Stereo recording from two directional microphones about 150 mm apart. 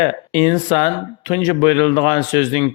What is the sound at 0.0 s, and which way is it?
Speech, 30° left (ahead or behind).